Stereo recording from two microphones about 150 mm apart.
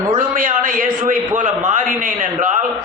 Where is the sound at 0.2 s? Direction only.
60° right (ahead or behind).